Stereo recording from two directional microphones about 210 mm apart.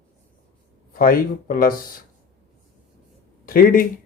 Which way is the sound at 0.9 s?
45° left (ahead or behind).